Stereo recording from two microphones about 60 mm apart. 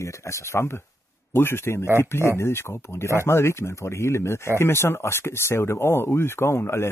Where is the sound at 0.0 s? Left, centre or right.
Left.